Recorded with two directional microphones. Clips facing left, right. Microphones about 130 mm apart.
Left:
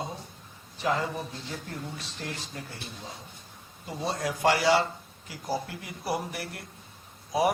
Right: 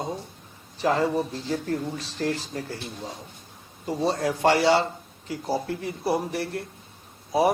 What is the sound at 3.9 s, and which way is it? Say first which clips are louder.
A man's voice: right 6 dB; 35° right (ahead or behind).